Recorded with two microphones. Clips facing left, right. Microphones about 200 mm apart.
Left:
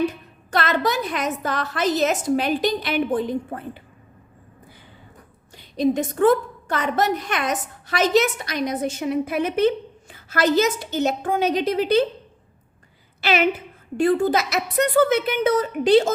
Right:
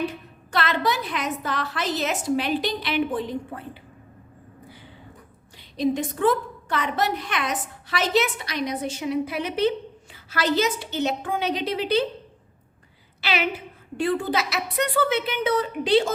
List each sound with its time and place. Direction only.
0.5 s a woman's voice: 45° left (ahead or behind)
5.5 s a woman's voice: 45° left (ahead or behind)
13.2 s a woman's voice: 50° left (ahead or behind)